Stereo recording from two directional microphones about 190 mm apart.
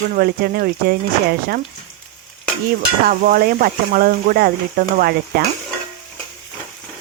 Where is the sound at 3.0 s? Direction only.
45° right (ahead or behind).